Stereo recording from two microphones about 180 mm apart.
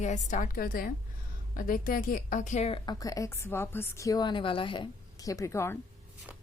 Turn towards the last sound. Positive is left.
turn(degrees=15)  # may be behind; listen again after turning